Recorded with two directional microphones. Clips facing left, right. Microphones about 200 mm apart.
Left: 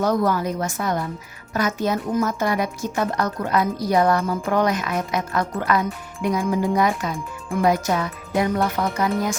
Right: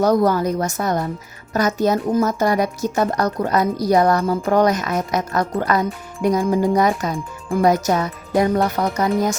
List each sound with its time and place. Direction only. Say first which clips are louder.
0.0 s speech: right 4 dB; 40° right (ahead or behind)